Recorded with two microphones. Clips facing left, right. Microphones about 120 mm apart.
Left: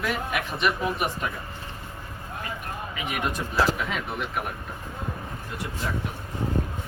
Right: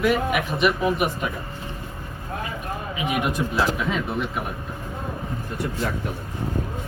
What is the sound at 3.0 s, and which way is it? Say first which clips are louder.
Speech: right 5 dB; 15° right (ahead or behind).